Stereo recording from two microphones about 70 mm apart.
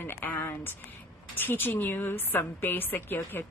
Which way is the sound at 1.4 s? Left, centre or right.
Left.